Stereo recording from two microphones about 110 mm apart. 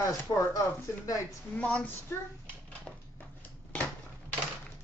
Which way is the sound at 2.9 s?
5° left (ahead or behind).